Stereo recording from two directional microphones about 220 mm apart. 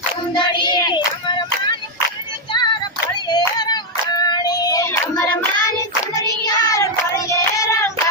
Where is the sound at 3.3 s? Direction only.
20° left (ahead or behind).